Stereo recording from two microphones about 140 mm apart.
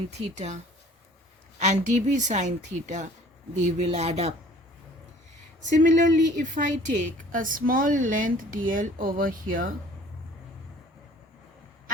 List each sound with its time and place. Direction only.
0.3 s a woman's voice: 55° right (ahead or behind)
5.7 s a woman's voice: 60° right (ahead or behind)
7.3 s speech: 75° right (ahead or behind)